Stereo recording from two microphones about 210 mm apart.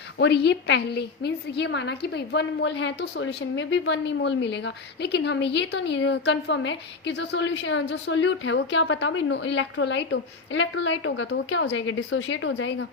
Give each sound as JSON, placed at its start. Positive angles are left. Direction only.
{"t": 0.2, "sound": "a woman's voice", "side_deg": 55}